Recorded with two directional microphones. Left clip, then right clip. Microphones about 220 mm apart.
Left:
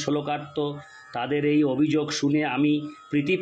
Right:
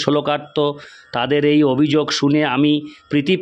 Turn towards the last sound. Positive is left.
turn(degrees=-50)  # may be behind; listen again after turning